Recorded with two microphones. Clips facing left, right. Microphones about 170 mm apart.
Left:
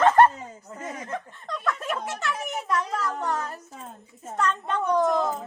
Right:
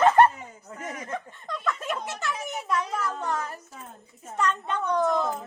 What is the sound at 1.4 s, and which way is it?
A child's voice, centre (ahead or behind).